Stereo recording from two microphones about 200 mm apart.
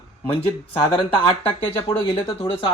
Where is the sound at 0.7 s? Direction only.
25° left (ahead or behind).